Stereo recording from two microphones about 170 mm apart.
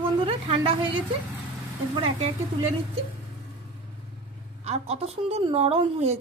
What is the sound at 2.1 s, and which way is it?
Speech, 35° right (ahead or behind).